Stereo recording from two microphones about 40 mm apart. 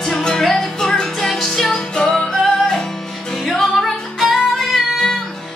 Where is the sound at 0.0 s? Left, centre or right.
Centre.